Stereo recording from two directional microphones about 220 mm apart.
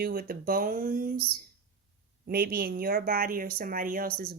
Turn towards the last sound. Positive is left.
turn(degrees=-45)  # may be behind; listen again after turning